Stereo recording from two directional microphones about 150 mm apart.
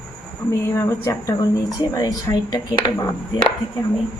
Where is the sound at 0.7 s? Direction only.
20° left (ahead or behind).